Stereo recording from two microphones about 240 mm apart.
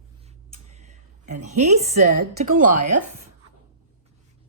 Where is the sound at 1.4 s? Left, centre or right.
Right.